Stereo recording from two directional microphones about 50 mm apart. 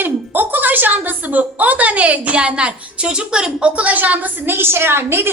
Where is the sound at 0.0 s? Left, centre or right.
Right.